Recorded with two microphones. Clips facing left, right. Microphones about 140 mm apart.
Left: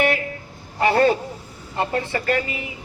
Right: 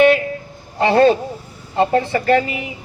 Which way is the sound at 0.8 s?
25° right (ahead or behind).